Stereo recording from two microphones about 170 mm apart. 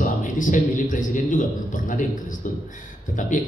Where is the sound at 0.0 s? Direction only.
50° left (ahead or behind).